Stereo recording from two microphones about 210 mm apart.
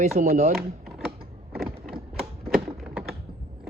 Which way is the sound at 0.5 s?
Centre (ahead or behind).